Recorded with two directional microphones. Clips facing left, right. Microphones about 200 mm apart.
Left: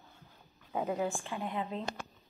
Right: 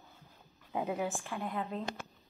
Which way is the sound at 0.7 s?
15° right (ahead or behind).